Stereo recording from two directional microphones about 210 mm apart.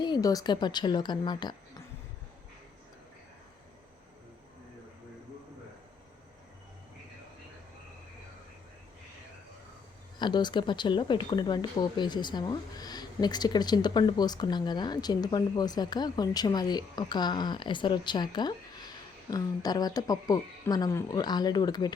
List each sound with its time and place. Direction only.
0.0 s speech: 20° left (ahead or behind)
10.2 s speech: 20° left (ahead or behind)